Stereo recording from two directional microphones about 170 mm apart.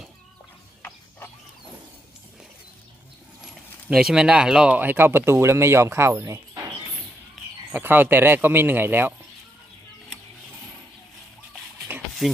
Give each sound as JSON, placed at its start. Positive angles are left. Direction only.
{"t": 3.8, "sound": "speech", "side_deg": -5}
{"t": 7.7, "sound": "speech", "side_deg": -10}
{"t": 11.9, "sound": "a sound", "side_deg": -10}